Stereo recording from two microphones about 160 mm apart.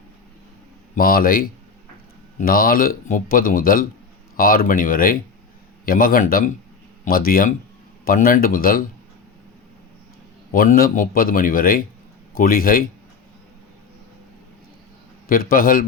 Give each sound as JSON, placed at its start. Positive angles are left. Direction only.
{"t": 0.9, "sound": "speech", "side_deg": 65}
{"t": 10.5, "sound": "speech", "side_deg": 60}
{"t": 15.3, "sound": "speech", "side_deg": 65}